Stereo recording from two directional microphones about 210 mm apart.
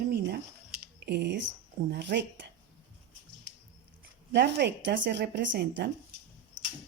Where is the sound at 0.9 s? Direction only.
50° right (ahead or behind).